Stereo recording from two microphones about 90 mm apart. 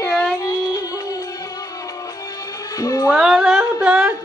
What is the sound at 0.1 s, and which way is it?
Music, 45° left (ahead or behind).